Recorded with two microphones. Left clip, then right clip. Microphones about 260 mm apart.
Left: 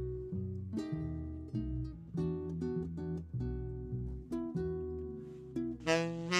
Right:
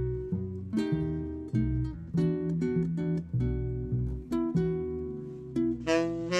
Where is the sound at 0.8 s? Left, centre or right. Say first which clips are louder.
Right 10 dB; centre.